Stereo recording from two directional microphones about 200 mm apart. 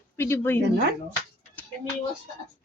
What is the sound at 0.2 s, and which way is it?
Speech, 10° left (ahead or behind).